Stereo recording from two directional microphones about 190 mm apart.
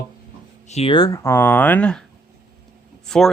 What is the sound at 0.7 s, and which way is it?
Speech, 30° left (ahead or behind).